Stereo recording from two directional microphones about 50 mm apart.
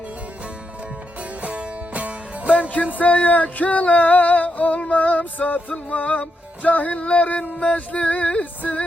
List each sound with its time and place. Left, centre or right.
1.4 s music: right
3.0 s music: left